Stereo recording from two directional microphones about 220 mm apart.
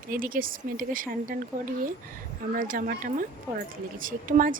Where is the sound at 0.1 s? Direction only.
40° right (ahead or behind).